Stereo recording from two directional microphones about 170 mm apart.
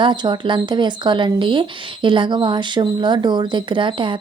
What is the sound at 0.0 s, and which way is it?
Speech, 25° right (ahead or behind).